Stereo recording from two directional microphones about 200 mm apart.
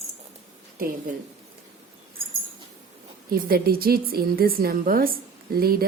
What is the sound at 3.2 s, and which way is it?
Speech, 45° right (ahead or behind).